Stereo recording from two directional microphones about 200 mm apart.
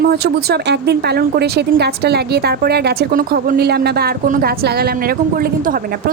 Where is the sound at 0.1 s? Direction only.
55° right (ahead or behind).